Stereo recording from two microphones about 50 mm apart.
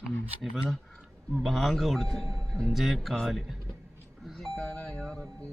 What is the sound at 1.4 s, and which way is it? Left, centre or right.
A man's voice, centre.